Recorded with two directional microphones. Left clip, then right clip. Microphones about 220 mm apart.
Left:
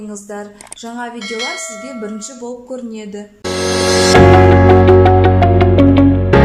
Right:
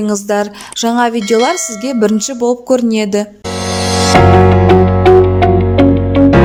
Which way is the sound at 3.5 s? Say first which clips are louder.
Left 2 dB; centre (ahead or behind).